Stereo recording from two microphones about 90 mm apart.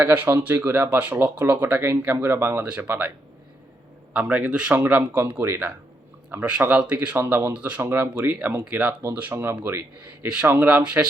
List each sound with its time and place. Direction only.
0.0 s speech: 25° right (ahead or behind)
4.1 s speech: 15° right (ahead or behind)
7.2 s speech: 25° right (ahead or behind)